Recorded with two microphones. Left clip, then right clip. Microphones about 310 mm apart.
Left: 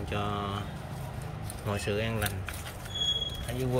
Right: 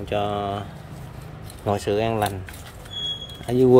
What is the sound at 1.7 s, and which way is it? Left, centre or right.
Speech, centre.